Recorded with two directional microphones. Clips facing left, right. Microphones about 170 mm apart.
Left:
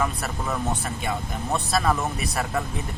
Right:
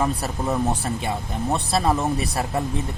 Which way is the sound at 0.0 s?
35° right (ahead or behind).